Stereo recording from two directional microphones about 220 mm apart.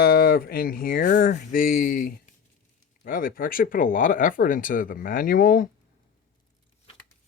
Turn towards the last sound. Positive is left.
turn(degrees=40)  # may be behind; listen again after turning